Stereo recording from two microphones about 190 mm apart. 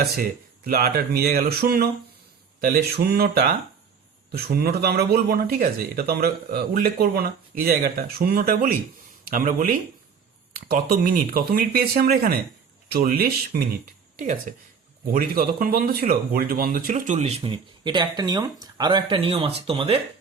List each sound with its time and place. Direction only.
0.0 s speech: 50° right (ahead or behind)
2.6 s mantra: 55° right (ahead or behind)
4.3 s speech: 55° right (ahead or behind); by 20.0 s 30° right (ahead or behind)